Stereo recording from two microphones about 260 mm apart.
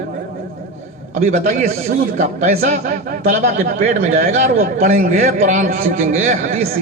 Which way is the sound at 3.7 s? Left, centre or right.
Right.